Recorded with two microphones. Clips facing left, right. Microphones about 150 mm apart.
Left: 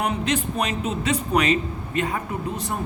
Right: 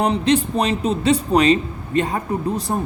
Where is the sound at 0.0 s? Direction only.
30° right (ahead or behind).